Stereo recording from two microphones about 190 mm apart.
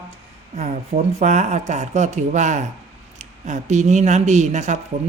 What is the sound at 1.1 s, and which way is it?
Speech, 35° right (ahead or behind).